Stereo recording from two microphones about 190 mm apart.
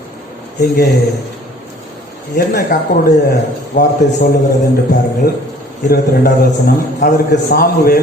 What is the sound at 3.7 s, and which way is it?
Speech, 65° left (ahead or behind).